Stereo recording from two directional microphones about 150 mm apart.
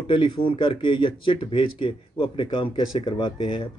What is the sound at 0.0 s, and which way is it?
Speech, 35° left (ahead or behind).